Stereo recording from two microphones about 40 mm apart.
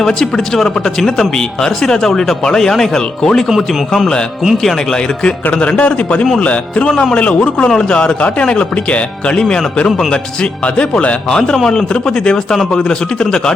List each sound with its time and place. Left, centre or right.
0.0 s speech: centre
4.6 s speech: centre
5.5 s speech: left
6.9 s speech: centre
9.4 s speech: centre
10.1 s speech: left
11.3 s speech: centre